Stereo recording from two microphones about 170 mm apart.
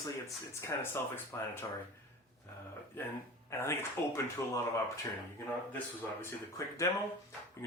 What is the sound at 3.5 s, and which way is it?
Speech, 15° left (ahead or behind).